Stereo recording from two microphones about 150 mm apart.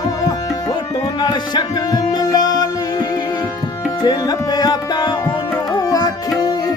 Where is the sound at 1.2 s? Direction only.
30° left (ahead or behind).